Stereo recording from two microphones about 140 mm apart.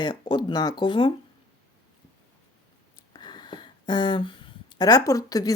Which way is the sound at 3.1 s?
30° left (ahead or behind).